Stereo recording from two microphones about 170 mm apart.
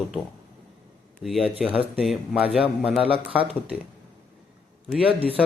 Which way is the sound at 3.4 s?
35° right (ahead or behind).